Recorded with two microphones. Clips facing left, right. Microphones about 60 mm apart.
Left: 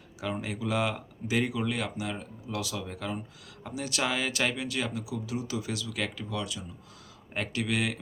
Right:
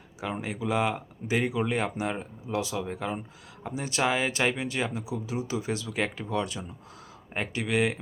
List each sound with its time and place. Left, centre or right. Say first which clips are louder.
0.2 s speech: right 1 dB; right
7.3 s speech: right 3 dB; right